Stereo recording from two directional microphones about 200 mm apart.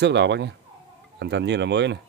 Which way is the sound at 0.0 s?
60° right (ahead or behind).